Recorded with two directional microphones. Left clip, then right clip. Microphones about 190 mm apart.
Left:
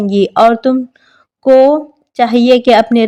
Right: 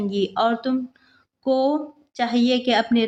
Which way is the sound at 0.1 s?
50° left (ahead or behind).